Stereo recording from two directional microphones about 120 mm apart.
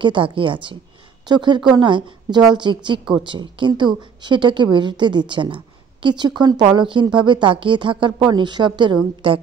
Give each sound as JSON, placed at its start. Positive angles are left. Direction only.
{"t": 0.0, "sound": "a woman's voice", "side_deg": -45}